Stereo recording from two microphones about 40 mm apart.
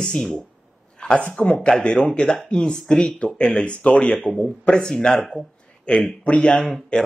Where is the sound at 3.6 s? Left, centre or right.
Left.